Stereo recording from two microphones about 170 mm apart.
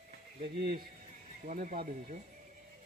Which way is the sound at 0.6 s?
55° right (ahead or behind).